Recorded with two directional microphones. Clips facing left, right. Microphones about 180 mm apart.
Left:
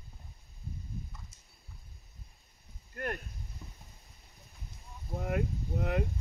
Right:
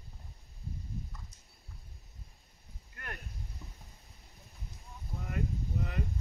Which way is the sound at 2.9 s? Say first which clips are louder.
Left 10 dB; 45° left (ahead or behind).